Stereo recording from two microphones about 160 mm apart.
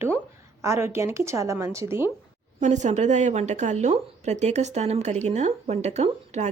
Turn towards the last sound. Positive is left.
turn(degrees=-45)  # may be behind; listen again after turning